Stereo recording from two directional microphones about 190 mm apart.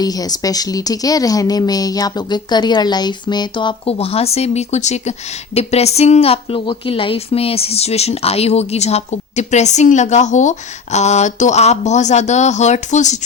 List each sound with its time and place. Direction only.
0.0 s a woman's voice: 20° left (ahead or behind); by 13.1 s 40° left (ahead or behind)